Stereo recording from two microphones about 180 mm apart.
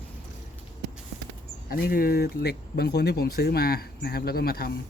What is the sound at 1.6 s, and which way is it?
Speech, 55° left (ahead or behind).